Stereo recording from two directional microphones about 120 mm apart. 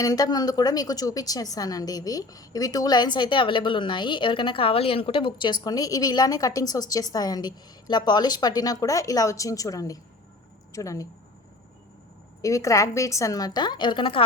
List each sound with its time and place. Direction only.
0.0 s a woman's voice: 30° left (ahead or behind)
12.4 s a woman's voice: 25° left (ahead or behind); by 14.3 s 45° left (ahead or behind)